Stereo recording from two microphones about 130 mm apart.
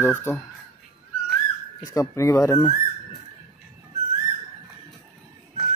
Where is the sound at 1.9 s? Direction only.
25° left (ahead or behind).